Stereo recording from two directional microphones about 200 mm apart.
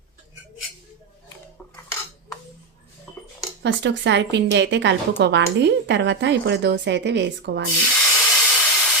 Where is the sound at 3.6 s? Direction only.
60° right (ahead or behind).